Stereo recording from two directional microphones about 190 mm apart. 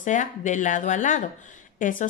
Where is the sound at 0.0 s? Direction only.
40° left (ahead or behind).